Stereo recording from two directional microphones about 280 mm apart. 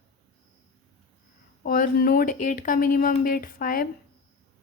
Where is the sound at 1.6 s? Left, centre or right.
Left.